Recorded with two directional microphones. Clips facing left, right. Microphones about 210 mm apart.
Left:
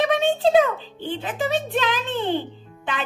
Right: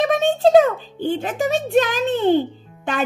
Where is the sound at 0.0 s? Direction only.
45° right (ahead or behind).